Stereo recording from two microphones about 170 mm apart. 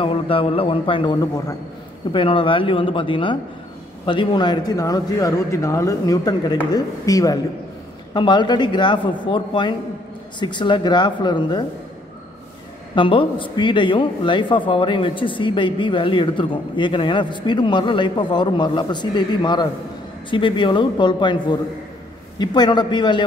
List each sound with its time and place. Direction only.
0.0 s a man's voice: 30° left (ahead or behind)
12.9 s a man's voice: 30° left (ahead or behind)